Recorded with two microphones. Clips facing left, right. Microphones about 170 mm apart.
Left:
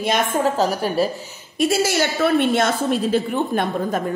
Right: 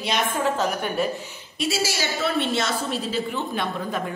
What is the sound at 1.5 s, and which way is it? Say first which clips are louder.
A woman's voice: left 7 dB; 50° left (ahead or behind).